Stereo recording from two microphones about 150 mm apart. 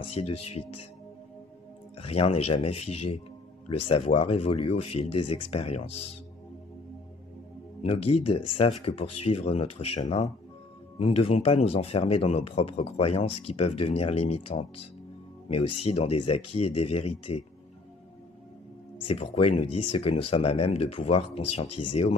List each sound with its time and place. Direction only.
0.1 s speech: 40° left (ahead or behind)
2.0 s speech: 40° left (ahead or behind)
7.8 s speech: 40° left (ahead or behind)
19.0 s speech: 40° left (ahead or behind)